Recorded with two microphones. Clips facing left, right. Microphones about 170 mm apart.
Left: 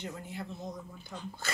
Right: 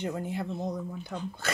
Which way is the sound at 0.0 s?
60° right (ahead or behind).